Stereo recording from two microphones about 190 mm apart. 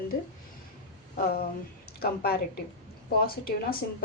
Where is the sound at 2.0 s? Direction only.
55° left (ahead or behind).